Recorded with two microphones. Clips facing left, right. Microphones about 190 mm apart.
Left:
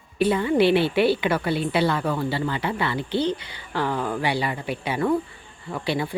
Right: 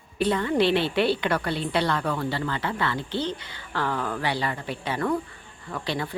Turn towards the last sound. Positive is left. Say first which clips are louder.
# left 4 dB
turn(degrees=10)  # may be behind; listen again after turning